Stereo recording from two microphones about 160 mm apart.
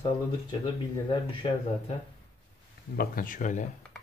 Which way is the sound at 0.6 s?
35° left (ahead or behind).